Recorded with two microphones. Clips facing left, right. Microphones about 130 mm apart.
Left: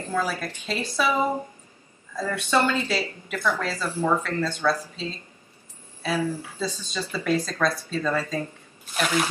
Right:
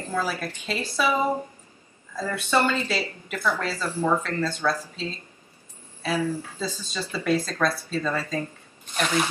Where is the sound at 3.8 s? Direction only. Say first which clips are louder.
Even; 10° left (ahead or behind).